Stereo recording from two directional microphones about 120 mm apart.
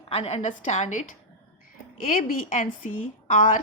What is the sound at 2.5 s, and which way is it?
A woman's voice, 90° left.